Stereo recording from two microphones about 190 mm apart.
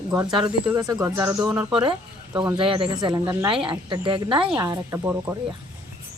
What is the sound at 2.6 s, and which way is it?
Speech, 25° right (ahead or behind).